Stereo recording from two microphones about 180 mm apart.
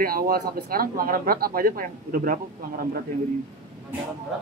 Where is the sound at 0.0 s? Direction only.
55° right (ahead or behind).